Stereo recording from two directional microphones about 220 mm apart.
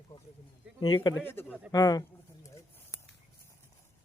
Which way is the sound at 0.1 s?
25° left (ahead or behind).